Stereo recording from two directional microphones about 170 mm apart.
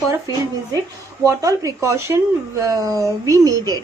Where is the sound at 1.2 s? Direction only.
20° right (ahead or behind).